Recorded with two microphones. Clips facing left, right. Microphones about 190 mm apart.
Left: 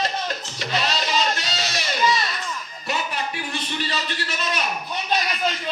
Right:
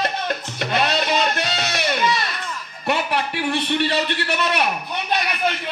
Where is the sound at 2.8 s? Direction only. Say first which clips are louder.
Right 6 dB; 60° right (ahead or behind).